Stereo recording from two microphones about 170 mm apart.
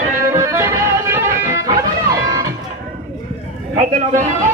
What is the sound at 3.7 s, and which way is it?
Speech, 45° right (ahead or behind).